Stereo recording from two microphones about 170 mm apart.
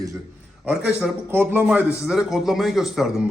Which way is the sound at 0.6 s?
5° right (ahead or behind).